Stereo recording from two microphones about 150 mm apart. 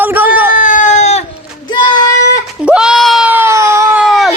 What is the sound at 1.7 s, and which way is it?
Speech, 30° left (ahead or behind).